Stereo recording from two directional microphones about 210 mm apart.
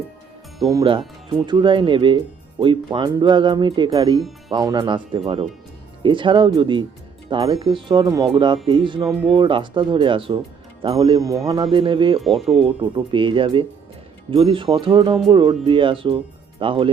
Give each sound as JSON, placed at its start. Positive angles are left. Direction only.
{"t": 0.7, "sound": "speech", "side_deg": -20}
{"t": 12.2, "sound": "speech", "side_deg": 0}
{"t": 12.6, "sound": "speech", "side_deg": -25}